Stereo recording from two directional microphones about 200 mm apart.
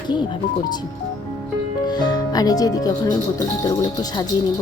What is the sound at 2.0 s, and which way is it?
Speech, 20° left (ahead or behind).